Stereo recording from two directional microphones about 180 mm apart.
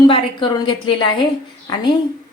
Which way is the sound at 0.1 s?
25° left (ahead or behind).